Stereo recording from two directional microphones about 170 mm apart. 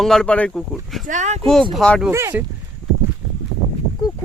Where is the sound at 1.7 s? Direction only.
Centre (ahead or behind).